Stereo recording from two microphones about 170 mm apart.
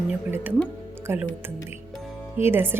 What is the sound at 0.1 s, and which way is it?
Speech, 10° right (ahead or behind).